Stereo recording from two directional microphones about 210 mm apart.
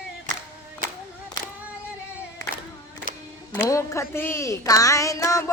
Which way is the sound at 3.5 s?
10° left (ahead or behind).